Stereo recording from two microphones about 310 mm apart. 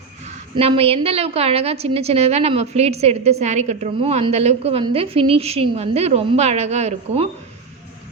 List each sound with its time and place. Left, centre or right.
0.3 s a woman's voice: centre